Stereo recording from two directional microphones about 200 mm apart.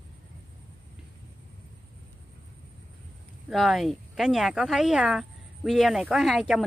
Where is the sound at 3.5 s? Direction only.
Centre (ahead or behind).